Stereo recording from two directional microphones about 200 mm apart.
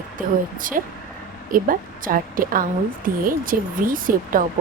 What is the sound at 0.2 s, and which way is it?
A woman's voice, 45° right (ahead or behind).